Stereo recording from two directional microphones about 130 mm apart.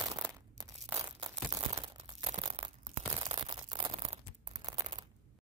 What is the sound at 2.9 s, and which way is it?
Crunch, 40° right (ahead or behind).